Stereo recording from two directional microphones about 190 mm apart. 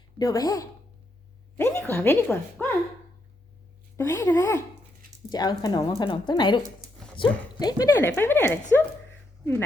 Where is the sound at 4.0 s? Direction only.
15° left (ahead or behind).